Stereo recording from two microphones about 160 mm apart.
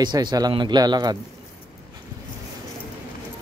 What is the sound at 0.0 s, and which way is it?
Speech, 25° right (ahead or behind).